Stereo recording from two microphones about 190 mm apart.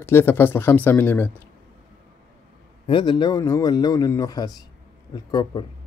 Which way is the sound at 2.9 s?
25° left (ahead or behind).